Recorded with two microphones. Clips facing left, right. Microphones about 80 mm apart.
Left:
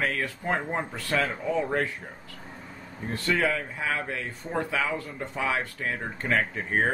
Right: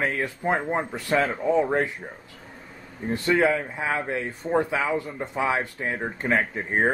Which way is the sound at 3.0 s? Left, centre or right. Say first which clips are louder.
Right 5 dB; centre.